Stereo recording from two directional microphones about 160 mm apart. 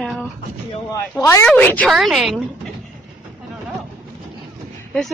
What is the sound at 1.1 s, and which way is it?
Speech, 15° left (ahead or behind).